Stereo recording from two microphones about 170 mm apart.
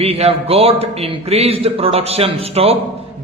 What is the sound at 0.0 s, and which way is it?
A man's voice, 35° right (ahead or behind).